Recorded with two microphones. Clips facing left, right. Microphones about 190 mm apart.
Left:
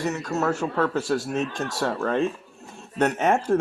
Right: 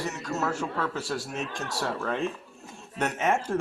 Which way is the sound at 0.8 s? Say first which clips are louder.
Left 7 dB; 45° left (ahead or behind).